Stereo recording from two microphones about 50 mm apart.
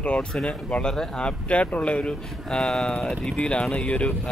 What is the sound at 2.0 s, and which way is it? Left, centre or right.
Speech, centre.